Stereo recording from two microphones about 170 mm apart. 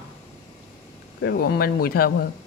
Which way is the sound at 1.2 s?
65° left (ahead or behind).